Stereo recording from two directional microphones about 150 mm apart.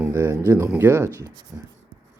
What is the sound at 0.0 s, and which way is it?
Speech, 15° right (ahead or behind).